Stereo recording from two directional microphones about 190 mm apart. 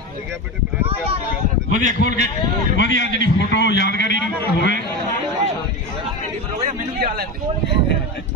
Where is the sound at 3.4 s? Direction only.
65° left (ahead or behind).